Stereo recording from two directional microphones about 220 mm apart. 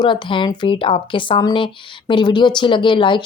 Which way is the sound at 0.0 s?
20° left (ahead or behind).